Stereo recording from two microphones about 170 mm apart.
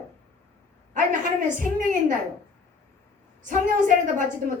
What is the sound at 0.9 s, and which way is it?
A woman's voice, 50° right (ahead or behind).